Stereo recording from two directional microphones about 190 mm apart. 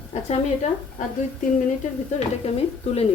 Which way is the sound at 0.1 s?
35° left (ahead or behind).